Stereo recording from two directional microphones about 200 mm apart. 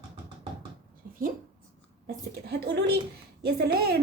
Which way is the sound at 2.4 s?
55° right (ahead or behind).